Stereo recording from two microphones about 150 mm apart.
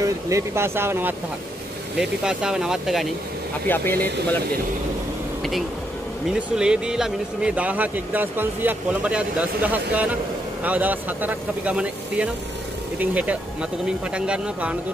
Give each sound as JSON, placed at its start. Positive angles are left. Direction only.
{"t": 0.0, "sound": "speech", "side_deg": -20}
{"t": 2.0, "sound": "speech", "side_deg": -5}
{"t": 3.6, "sound": "speech", "side_deg": 15}
{"t": 6.3, "sound": "speech", "side_deg": -5}